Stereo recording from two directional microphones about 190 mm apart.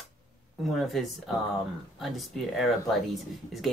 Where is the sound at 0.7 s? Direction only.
Centre (ahead or behind).